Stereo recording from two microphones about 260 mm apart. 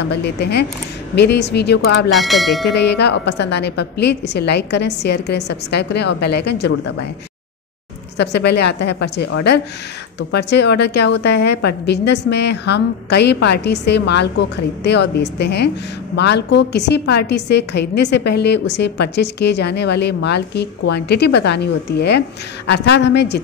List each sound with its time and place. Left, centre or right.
0.0 s a woman's voice: left
2.0 s speech: centre
2.7 s a woman's voice: left
8.2 s a woman's voice: left